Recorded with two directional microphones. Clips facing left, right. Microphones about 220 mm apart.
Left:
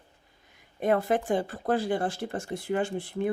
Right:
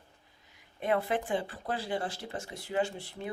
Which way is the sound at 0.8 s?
45° left (ahead or behind).